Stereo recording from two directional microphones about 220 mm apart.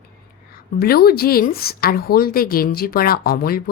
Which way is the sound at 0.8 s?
45° left (ahead or behind).